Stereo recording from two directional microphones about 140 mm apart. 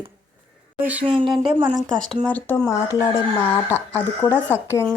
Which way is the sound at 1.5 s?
30° right (ahead or behind).